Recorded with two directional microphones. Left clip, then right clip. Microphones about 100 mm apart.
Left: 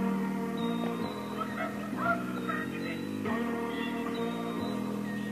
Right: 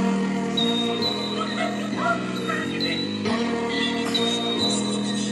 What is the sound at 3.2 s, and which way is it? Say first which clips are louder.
Music: right 7 dB; 25° left (ahead or behind).